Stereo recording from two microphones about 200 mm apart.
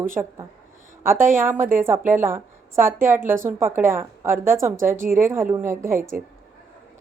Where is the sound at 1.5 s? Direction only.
45° right (ahead or behind).